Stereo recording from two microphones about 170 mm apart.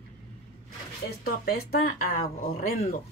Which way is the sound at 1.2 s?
60° left (ahead or behind).